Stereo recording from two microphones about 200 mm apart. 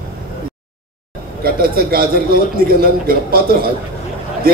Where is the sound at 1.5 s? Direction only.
50° right (ahead or behind).